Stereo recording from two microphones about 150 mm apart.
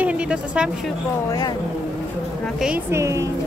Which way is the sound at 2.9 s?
20° right (ahead or behind).